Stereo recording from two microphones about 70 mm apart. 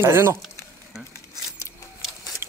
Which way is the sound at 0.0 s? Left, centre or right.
Right.